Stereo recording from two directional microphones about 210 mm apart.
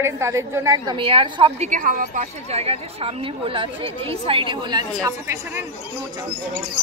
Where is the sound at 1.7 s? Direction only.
40° right (ahead or behind); by 5.6 s 15° right (ahead or behind).